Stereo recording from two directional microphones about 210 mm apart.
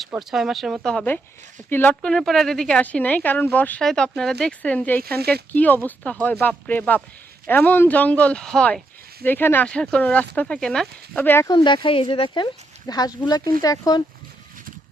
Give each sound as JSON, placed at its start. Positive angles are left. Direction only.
{"t": 0.0, "sound": "speech", "side_deg": 0}
{"t": 5.0, "sound": "speech", "side_deg": -50}
{"t": 5.3, "sound": "speech", "side_deg": 5}